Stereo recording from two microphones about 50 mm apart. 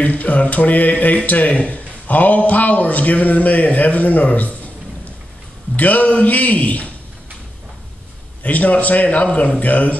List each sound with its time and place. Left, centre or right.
0.0 s speech: left
5.8 s speech: left
8.4 s speech: left